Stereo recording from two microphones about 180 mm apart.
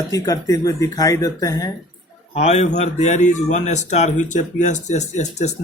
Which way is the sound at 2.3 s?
35° left (ahead or behind).